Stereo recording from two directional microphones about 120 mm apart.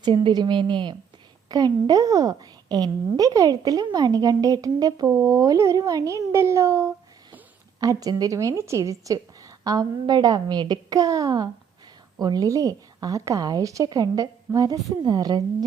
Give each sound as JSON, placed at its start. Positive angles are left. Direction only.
{"t": 0.0, "sound": "a woman's voice", "side_deg": -40}